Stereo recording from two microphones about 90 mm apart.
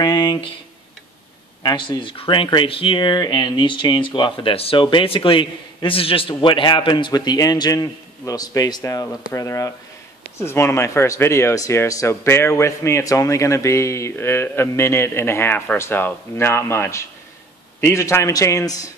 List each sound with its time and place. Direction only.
0.0 s speech: 55° left (ahead or behind)
1.6 s speech: 55° left (ahead or behind); by 18.9 s 40° left (ahead or behind)